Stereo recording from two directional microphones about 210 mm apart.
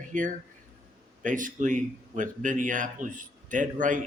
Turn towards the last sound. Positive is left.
turn(degrees=-40)  # may be behind; listen again after turning